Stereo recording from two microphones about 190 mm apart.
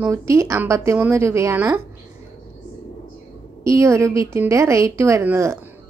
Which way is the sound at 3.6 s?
15° right (ahead or behind).